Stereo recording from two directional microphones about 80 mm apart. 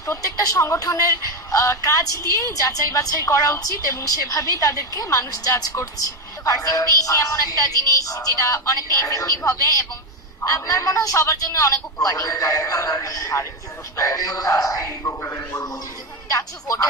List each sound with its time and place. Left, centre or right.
0.0 s a woman's voice: left
2.3 s music: left
4.6 s speech: left
6.4 s music: left
15.0 s speech: left